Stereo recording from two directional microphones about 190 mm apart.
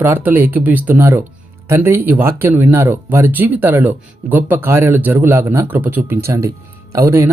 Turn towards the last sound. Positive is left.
turn(degrees=-15)  # may be behind; listen again after turning